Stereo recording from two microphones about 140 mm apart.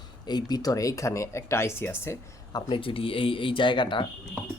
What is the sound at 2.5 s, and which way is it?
Speech, 40° left (ahead or behind).